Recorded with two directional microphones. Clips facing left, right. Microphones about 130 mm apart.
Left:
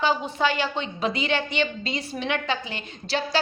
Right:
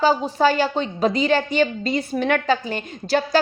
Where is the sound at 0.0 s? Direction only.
40° right (ahead or behind).